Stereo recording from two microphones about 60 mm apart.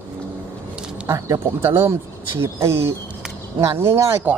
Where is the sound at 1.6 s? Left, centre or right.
Right.